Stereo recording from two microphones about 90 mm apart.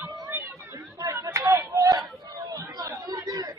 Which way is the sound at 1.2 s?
35° right (ahead or behind).